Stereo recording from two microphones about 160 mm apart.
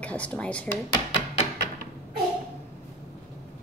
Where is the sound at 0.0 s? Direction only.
10° left (ahead or behind).